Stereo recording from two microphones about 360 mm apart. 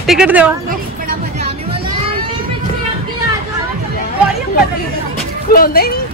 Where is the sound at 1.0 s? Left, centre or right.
Centre.